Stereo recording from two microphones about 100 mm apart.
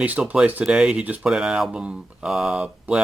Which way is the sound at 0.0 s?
15° right (ahead or behind).